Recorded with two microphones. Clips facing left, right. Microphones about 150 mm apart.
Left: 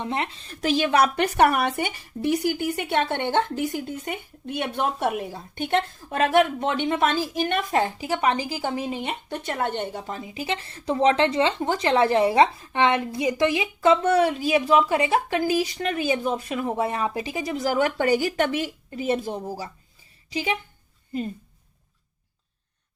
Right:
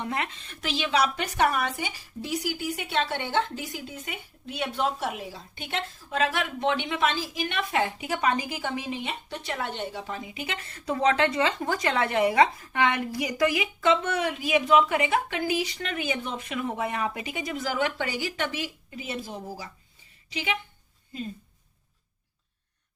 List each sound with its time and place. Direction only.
0.0 s speech: 30° left (ahead or behind); by 19.5 s 50° left (ahead or behind)